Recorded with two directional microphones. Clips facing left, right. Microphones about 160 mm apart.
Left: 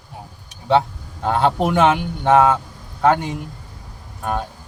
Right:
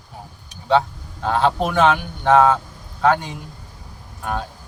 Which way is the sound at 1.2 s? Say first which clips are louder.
Left 1 dB; 20° left (ahead or behind).